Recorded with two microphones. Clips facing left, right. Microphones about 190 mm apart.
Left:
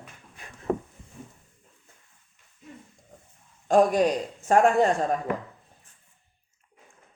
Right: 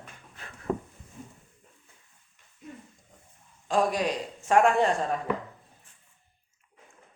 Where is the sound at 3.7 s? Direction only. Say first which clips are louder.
Left 6 dB; 45° left (ahead or behind).